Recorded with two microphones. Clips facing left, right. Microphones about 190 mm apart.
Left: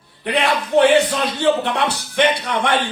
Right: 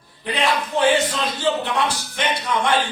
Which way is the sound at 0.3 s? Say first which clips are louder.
Left 3 dB; 65° left (ahead or behind).